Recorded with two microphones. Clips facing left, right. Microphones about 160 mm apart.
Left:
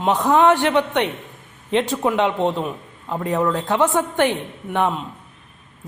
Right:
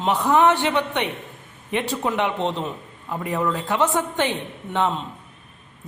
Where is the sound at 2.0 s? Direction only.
15° left (ahead or behind).